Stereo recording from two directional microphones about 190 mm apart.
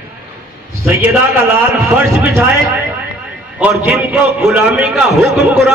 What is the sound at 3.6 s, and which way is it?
A man's voice, 5° right (ahead or behind).